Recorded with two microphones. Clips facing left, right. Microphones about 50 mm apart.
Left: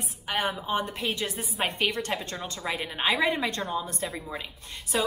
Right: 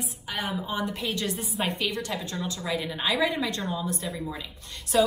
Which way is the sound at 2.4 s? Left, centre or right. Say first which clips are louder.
Right 2 dB; left.